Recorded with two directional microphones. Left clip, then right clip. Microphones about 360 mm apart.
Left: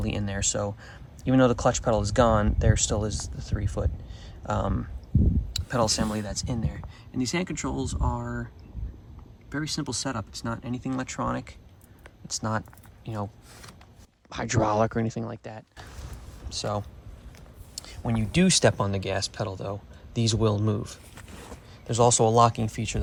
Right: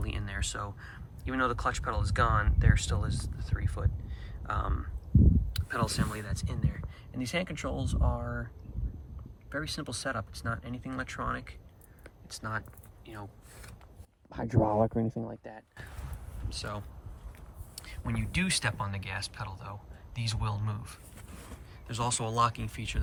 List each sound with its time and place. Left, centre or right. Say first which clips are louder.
0.0 s speech: left 8 dB; centre
4.2 s a sound: left 6 dB; centre
5.5 s speech: left 10 dB; centre
9.5 s speech: left 5 dB; centre
14.4 s speech: left 4 dB; right
16.5 s speech: left 9 dB; centre